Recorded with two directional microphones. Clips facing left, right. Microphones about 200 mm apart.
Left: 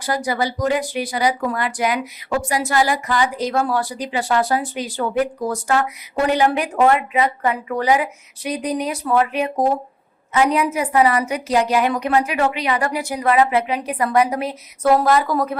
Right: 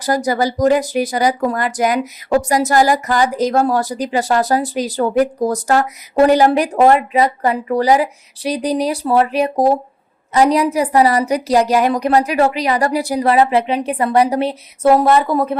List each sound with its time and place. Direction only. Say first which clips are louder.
0.0 s a woman's voice: right 5 dB; 40° right (ahead or behind); by 15.5 s 25° right (ahead or behind)